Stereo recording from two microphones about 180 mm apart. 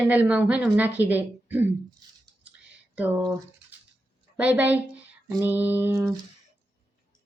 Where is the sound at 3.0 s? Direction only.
10° right (ahead or behind).